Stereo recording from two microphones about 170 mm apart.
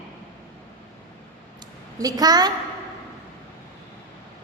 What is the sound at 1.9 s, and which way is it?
Speech, 20° right (ahead or behind).